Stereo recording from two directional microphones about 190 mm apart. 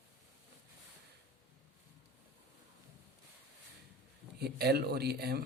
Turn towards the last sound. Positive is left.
turn(degrees=-55)  # may be behind; listen again after turning